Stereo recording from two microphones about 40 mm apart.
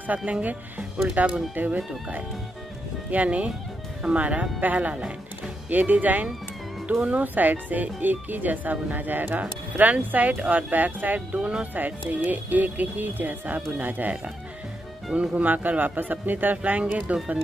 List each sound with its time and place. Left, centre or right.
0.2 s a man's voice: right
3.1 s speech: right
5.7 s a man's voice: right
6.9 s speech: right
7.3 s a man's voice: right
11.3 s speech: right
11.7 s a man's voice: right
15.1 s a man's voice: right